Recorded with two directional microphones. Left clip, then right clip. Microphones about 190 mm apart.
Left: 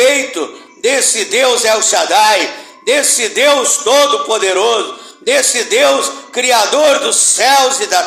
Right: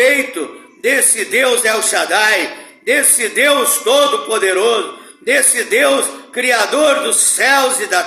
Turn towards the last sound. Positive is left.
turn(degrees=-15)  # may be behind; listen again after turning